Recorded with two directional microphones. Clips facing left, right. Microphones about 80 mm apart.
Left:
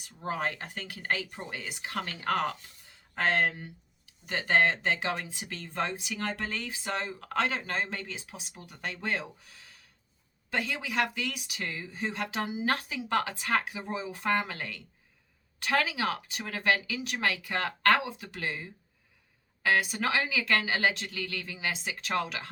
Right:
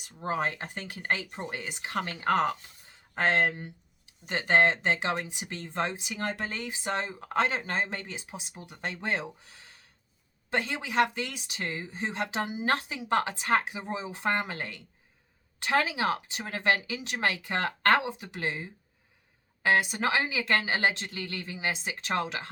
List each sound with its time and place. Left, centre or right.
0.3 s speech: right